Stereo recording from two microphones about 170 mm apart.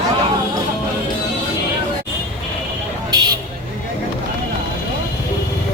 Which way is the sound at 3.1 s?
20° right (ahead or behind).